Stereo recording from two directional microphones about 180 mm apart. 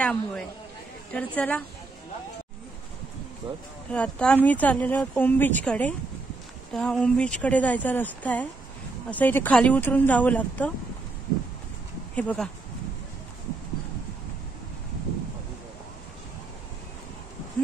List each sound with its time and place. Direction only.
0.0 s speech: 5° left (ahead or behind)
3.4 s speech: 25° right (ahead or behind)
3.9 s speech: 5° left (ahead or behind)
12.2 s speech: 10° left (ahead or behind)